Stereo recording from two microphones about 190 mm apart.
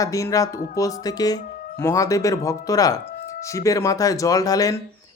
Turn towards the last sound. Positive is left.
turn(degrees=20)  # may be behind; listen again after turning